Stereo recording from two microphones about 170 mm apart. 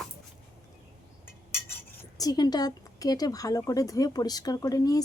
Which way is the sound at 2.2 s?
25° left (ahead or behind).